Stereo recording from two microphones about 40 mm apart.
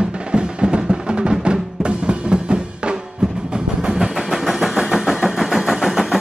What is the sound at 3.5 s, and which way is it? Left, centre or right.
Vehicle, centre.